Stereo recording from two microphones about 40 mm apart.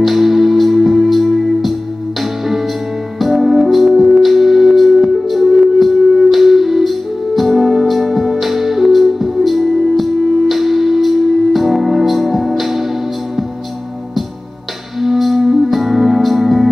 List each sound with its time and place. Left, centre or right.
0.0 s music: centre
3.2 s music: centre
15.0 s music: centre